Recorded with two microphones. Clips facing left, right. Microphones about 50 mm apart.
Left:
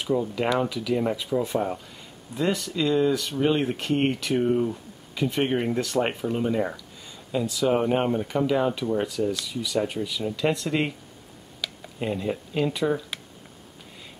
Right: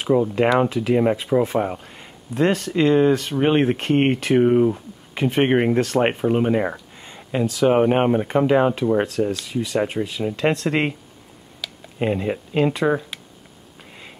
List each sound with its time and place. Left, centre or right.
0.0 s speech: right
11.6 s a sound: centre
12.0 s speech: right